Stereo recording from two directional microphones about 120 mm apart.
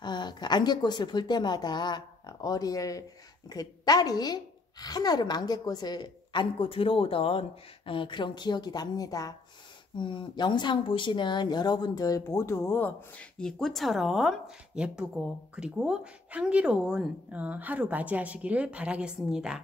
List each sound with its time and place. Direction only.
0.0 s a woman's voice: 40° left (ahead or behind)
9.9 s a woman's voice: 40° left (ahead or behind); by 19.6 s 5° right (ahead or behind)